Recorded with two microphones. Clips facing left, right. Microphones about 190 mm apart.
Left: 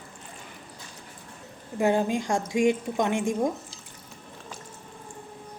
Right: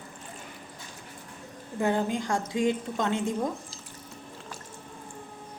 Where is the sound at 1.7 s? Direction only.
15° left (ahead or behind).